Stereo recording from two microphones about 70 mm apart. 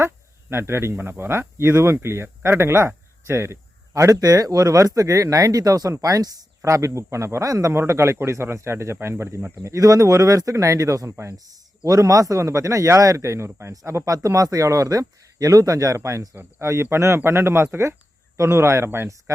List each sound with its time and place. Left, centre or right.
0.5 s speech: right
3.9 s speech: right
7.7 s speech: right
14.1 s speech: right
16.0 s speech: right
16.3 s speech: right